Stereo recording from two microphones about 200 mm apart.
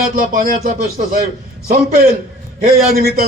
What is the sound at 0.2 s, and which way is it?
A man's voice, 40° right (ahead or behind).